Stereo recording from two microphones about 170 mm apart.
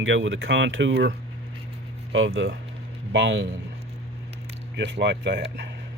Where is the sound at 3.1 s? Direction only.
90° right.